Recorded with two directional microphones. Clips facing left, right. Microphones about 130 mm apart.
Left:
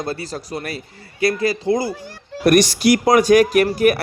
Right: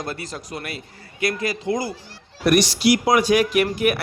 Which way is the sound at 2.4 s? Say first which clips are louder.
Left 3 dB; 45° left (ahead or behind).